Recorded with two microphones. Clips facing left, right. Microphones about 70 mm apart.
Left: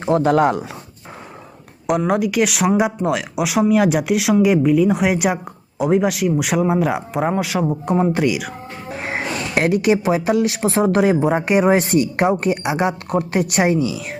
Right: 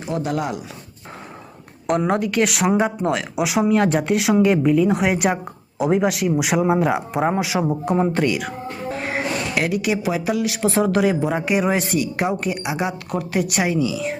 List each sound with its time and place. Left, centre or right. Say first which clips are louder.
0.2 s speech: left 8 dB; left
1.9 s speech: left 2 dB; centre
9.0 s music: left 1 dB; left
9.6 s speech: left 7 dB; left
13.1 s a woman's voice: left 3 dB; left